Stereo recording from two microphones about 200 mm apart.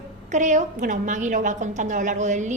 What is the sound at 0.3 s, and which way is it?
A woman's voice, 35° right (ahead or behind).